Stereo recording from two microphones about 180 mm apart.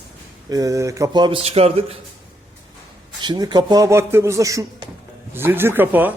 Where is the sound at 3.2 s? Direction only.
25° right (ahead or behind).